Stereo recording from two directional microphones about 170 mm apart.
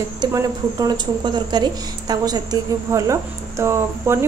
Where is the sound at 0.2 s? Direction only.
25° right (ahead or behind).